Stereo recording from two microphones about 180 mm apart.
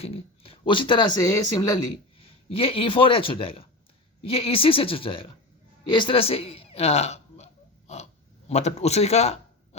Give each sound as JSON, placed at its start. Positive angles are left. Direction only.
{"t": 0.0, "sound": "a woman's voice", "side_deg": 35}